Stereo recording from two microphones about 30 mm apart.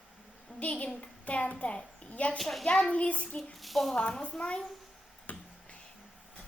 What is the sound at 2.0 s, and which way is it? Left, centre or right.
Speech, left.